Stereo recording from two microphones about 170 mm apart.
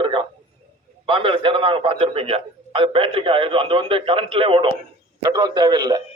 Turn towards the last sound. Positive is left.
turn(degrees=-25)  # may be behind; listen again after turning